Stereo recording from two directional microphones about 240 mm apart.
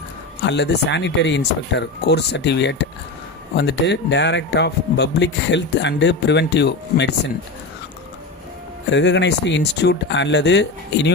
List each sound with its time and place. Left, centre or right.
0.4 s speech: left
8.9 s speech: left